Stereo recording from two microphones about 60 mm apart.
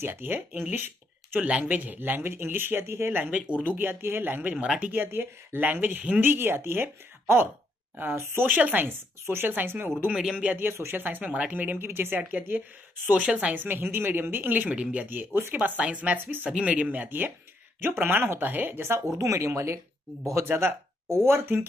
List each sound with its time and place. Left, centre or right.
0.1 s speech: right
10.7 s speech: right
11.0 s speech: right
13.1 s a woman's voice: centre
13.6 s speech: right
15.0 s speech: right
15.5 s speech: right
18.8 s speech: right
19.1 s speech: right
20.4 s speech: right